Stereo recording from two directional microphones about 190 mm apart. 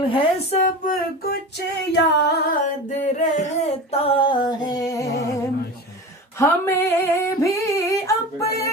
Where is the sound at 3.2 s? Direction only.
40° left (ahead or behind); by 5.0 s 20° left (ahead or behind).